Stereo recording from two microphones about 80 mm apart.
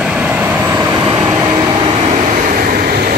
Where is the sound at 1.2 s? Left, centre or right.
Right.